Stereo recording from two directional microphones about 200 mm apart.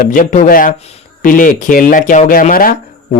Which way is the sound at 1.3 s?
40° left (ahead or behind).